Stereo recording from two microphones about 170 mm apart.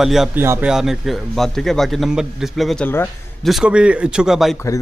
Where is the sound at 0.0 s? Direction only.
Centre (ahead or behind).